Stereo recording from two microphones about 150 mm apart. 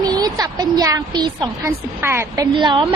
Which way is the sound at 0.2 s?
25° right (ahead or behind).